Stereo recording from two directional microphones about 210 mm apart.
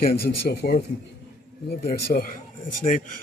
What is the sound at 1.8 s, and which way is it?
Speech, 45° left (ahead or behind).